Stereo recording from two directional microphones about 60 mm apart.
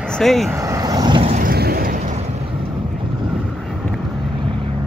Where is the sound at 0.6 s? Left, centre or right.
Right.